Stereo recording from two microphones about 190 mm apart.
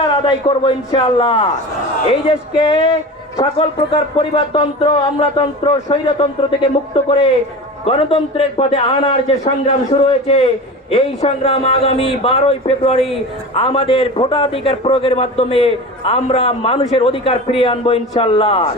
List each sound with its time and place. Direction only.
0.3 s a man's voice: 25° left (ahead or behind)